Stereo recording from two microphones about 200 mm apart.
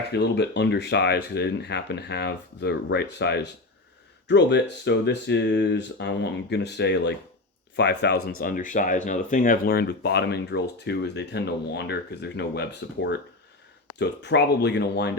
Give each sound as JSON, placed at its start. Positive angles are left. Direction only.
{"t": 0.1, "sound": "speech", "side_deg": 55}